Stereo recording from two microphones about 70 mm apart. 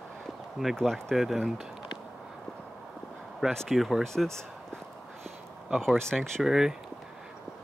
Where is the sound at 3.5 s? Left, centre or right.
Centre.